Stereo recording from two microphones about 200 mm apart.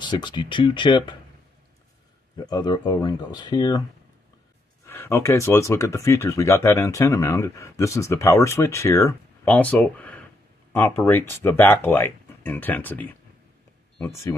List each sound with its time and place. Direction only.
0.0 s speech: 25° left (ahead or behind)
2.3 s speech: 20° left (ahead or behind)
4.8 s speech: 10° left (ahead or behind)